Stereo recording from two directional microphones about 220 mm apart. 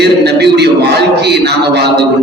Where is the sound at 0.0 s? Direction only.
50° right (ahead or behind).